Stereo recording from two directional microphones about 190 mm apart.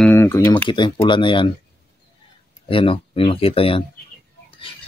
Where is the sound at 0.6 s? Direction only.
25° left (ahead or behind).